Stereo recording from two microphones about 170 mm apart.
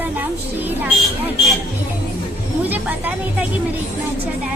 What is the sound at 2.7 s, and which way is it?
Speech, 10° right (ahead or behind).